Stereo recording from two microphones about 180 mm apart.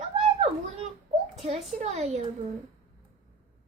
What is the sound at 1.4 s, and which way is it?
Speech, 35° right (ahead or behind).